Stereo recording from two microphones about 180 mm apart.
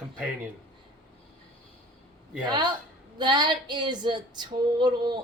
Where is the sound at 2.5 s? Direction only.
25° right (ahead or behind).